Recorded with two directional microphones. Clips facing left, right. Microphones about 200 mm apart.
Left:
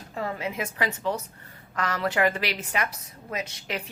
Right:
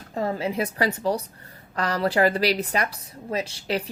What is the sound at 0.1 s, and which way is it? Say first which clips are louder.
A woman's voice: right 5 dB; 35° right (ahead or behind).